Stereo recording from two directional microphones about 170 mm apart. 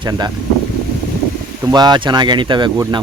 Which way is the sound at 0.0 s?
25° right (ahead or behind).